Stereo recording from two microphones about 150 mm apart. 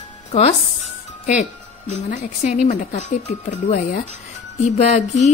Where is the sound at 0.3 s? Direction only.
45° left (ahead or behind).